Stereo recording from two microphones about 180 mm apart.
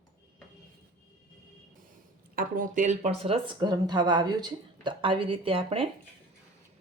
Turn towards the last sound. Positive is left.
turn(degrees=-30)  # may be behind; listen again after turning